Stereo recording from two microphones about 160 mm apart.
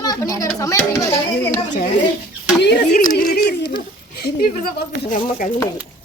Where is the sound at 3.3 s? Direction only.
80° left.